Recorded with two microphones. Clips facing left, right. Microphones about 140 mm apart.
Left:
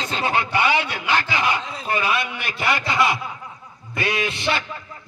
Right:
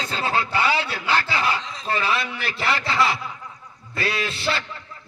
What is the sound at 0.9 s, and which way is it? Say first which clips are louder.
Speech: left 1 dB; 15° left (ahead or behind).